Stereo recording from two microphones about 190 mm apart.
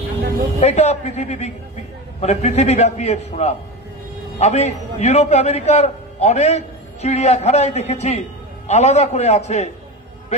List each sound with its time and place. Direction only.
0.6 s a man's voice: 35° left (ahead or behind)